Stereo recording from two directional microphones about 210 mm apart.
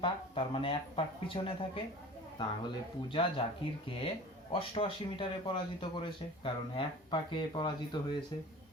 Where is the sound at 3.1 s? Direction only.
25° left (ahead or behind).